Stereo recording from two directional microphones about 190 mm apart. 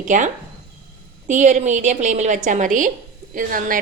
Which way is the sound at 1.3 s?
40° right (ahead or behind).